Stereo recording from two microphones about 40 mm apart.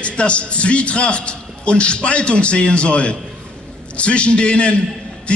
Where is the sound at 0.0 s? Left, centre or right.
Left.